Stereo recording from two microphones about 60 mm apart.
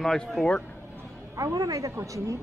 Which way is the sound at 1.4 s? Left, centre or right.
Right.